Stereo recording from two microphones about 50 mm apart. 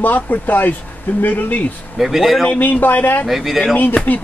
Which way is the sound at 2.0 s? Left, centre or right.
Centre.